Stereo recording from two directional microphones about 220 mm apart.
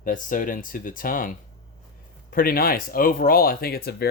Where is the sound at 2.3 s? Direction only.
40° left (ahead or behind).